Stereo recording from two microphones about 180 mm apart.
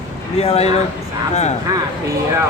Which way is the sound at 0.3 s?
35° left (ahead or behind).